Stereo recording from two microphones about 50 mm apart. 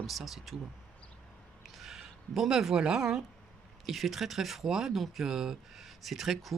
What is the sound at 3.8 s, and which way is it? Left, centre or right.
Speech, centre.